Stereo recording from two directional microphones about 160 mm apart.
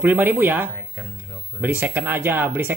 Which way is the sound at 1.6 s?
15° right (ahead or behind).